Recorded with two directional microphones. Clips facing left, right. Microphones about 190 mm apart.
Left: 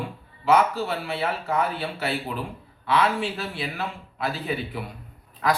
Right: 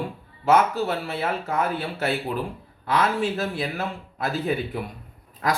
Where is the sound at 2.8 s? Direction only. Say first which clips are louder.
Even; 45° right (ahead or behind).